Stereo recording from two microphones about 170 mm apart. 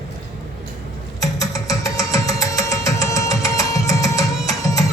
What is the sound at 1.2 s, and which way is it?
Music, 20° left (ahead or behind).